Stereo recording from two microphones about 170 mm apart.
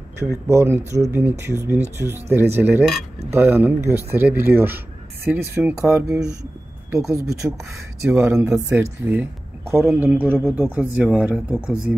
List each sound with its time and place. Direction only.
0.2 s speech: 15° right (ahead or behind)